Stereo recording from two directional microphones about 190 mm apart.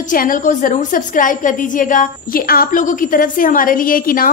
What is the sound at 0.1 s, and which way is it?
A woman's voice, 45° left (ahead or behind).